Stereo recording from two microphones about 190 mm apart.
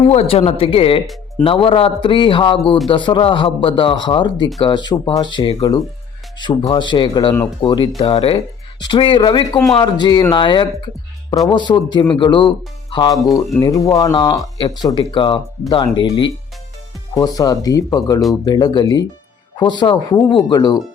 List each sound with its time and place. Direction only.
0.1 s a man's voice: 35° left (ahead or behind)